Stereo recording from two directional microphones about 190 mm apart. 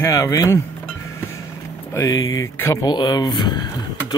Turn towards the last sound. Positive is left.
turn(degrees=20)  # may be behind; listen again after turning